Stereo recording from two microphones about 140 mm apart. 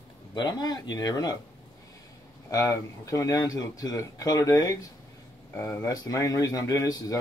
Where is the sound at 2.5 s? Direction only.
25° left (ahead or behind).